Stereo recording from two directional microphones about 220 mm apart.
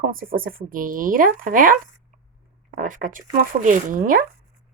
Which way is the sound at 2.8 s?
35° right (ahead or behind).